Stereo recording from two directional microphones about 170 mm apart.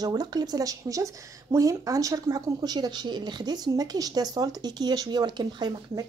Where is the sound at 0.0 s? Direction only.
25° right (ahead or behind).